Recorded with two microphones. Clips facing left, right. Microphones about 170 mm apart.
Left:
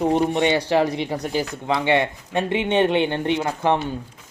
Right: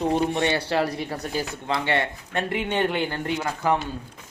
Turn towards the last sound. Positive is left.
turn(degrees=25)  # may be behind; listen again after turning